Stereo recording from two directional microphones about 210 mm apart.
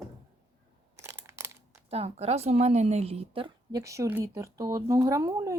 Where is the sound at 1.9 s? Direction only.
30° right (ahead or behind).